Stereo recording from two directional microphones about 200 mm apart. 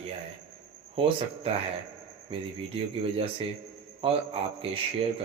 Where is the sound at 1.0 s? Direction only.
30° right (ahead or behind).